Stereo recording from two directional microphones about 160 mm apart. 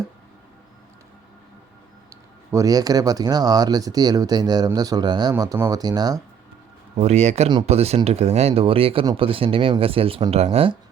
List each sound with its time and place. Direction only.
2.0 s speech: 20° right (ahead or behind)
6.9 s speech: 45° right (ahead or behind)